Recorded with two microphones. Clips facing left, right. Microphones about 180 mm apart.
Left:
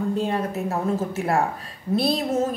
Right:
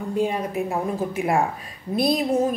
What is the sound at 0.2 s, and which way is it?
Speech, 10° right (ahead or behind).